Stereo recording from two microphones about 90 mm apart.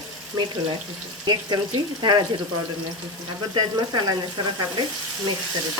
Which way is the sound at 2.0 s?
50° right (ahead or behind).